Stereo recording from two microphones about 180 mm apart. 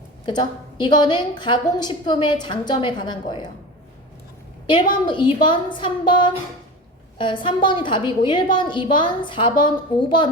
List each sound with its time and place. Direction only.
0.3 s a woman's voice: 25° left (ahead or behind)
4.6 s a woman's voice: 25° left (ahead or behind)